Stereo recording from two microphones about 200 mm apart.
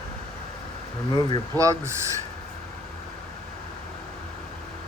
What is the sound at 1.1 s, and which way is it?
Speech, 20° left (ahead or behind).